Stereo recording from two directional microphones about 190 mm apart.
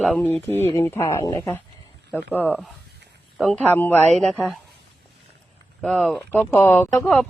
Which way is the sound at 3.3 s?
5° left (ahead or behind).